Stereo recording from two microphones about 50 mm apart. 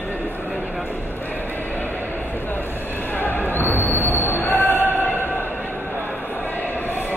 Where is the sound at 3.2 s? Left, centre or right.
Left.